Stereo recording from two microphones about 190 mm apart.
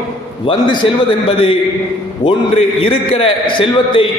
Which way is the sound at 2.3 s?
30° left (ahead or behind).